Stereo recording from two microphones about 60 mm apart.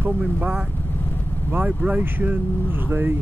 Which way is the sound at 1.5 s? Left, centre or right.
Right.